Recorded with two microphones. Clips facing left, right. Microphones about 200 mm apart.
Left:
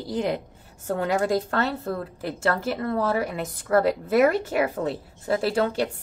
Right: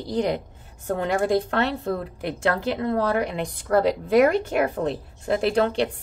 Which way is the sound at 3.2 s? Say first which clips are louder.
Right 2 dB; 5° left (ahead or behind).